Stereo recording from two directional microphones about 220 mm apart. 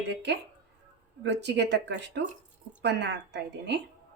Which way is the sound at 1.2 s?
50° right (ahead or behind).